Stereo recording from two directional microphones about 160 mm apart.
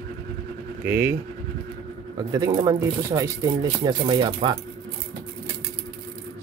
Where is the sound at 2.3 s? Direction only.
25° right (ahead or behind).